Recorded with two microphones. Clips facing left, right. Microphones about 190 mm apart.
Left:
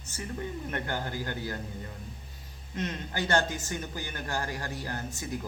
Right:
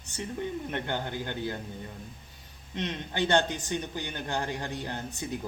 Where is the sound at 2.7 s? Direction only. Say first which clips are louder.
Right 1 dB; 20° right (ahead or behind).